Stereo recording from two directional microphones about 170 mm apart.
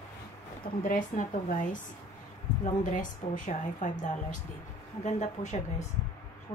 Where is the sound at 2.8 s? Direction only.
50° left (ahead or behind).